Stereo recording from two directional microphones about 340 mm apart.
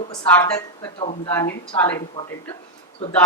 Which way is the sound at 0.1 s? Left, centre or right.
Centre.